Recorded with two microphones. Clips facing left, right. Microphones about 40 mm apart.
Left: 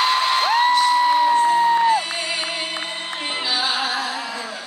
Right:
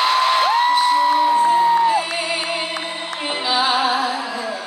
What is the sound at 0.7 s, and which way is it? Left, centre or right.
Music, centre.